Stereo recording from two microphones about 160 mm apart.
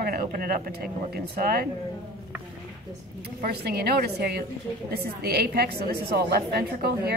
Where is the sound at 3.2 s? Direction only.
85° right.